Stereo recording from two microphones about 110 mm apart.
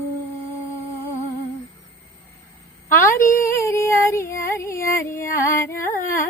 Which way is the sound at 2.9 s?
25° left (ahead or behind).